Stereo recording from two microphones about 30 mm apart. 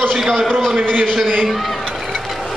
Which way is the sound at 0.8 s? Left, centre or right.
Right.